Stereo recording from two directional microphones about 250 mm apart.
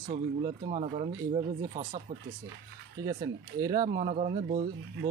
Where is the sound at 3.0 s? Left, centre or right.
Centre.